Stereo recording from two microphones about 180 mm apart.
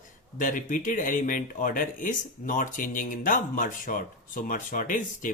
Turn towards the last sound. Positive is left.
turn(degrees=45)  # may be behind; listen again after turning